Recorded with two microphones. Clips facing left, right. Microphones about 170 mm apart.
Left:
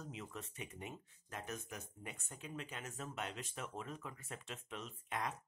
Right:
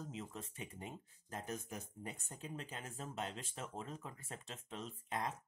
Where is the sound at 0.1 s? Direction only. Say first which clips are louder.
Right 1 dB; 30° right (ahead or behind).